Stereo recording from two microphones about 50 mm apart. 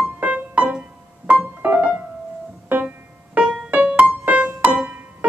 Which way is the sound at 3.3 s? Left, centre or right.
Centre.